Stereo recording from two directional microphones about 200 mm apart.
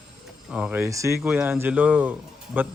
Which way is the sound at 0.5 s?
5° right (ahead or behind).